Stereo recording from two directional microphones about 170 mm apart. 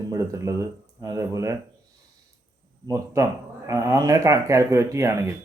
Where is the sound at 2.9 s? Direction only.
15° right (ahead or behind).